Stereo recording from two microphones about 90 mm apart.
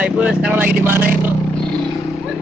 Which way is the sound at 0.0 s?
10° right (ahead or behind).